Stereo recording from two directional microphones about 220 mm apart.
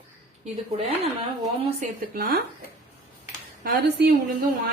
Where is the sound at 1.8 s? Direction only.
40° right (ahead or behind).